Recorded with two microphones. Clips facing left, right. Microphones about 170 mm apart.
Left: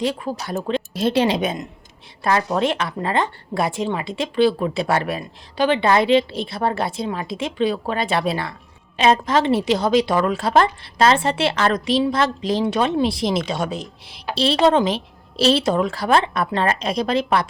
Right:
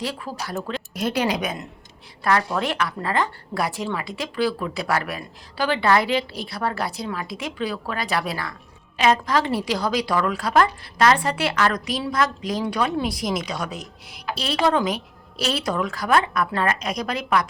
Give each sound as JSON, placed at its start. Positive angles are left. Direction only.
{"t": 0.0, "sound": "a woman's voice", "side_deg": 20}